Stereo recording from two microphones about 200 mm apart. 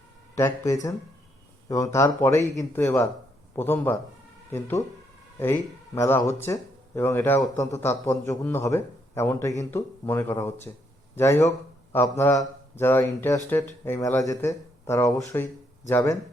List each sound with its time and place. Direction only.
0.3 s speech: 15° left (ahead or behind)
5.4 s speech: 15° left (ahead or behind)